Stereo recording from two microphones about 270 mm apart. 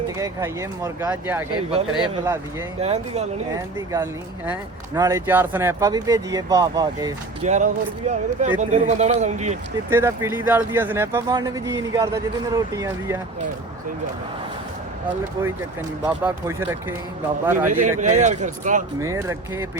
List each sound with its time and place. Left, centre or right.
0.2 s speech: centre
2.8 s speech: right
3.9 s speech: centre
7.4 s speech: right
9.9 s speech: centre
16.0 s speech: centre
17.7 s speech: right
18.9 s speech: centre